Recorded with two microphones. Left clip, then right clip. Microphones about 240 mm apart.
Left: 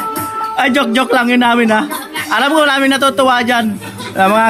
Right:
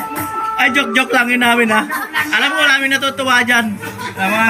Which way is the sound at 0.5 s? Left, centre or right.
Centre.